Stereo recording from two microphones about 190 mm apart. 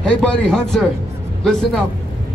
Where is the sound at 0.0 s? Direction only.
5° left (ahead or behind).